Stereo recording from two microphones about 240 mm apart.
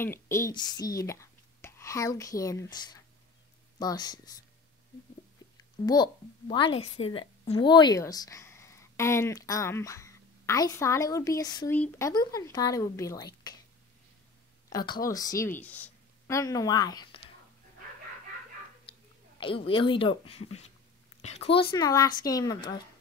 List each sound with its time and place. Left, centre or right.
0.0 s a woman's voice: centre
5.9 s speech: centre
14.7 s speech: centre
19.4 s a woman's voice: left